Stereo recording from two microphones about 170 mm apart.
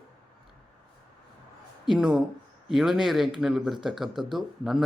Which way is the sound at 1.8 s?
5° right (ahead or behind).